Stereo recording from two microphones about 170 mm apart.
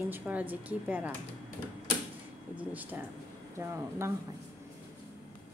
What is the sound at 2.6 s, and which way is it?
Speech, 10° right (ahead or behind).